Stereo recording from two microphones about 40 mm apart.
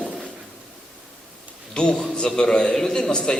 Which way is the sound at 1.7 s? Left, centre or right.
Left.